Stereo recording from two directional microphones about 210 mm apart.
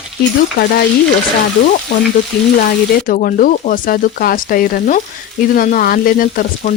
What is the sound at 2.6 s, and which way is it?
Speech, 40° left (ahead or behind).